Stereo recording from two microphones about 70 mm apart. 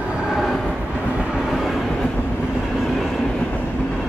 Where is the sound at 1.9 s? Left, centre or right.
Centre.